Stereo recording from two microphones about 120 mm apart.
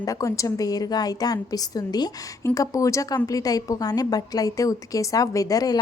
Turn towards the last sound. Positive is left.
turn(degrees=30)  # may be behind; listen again after turning